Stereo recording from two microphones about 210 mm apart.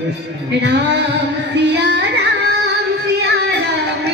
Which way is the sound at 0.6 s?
55° right (ahead or behind).